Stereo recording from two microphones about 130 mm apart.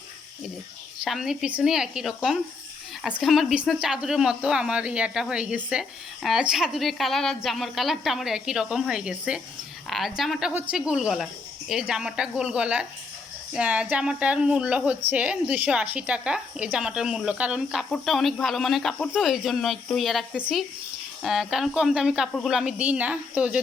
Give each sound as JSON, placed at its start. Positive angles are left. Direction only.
{"t": 1.0, "sound": "a woman's voice", "side_deg": -5}
{"t": 10.5, "sound": "a woman's voice", "side_deg": -10}